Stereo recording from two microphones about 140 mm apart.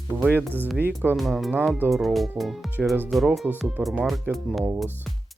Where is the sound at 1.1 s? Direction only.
Centre (ahead or behind).